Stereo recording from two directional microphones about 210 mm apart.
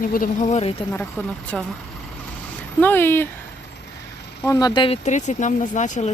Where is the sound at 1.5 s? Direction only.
5° left (ahead or behind).